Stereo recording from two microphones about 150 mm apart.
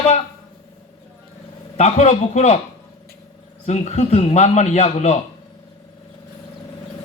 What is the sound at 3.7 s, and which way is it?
A man's voice, 45° left (ahead or behind).